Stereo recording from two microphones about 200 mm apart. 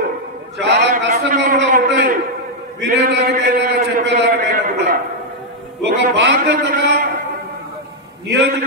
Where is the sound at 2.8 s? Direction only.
55° right (ahead or behind).